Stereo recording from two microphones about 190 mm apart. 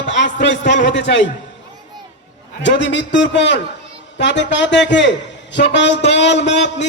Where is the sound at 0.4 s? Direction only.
65° left (ahead or behind).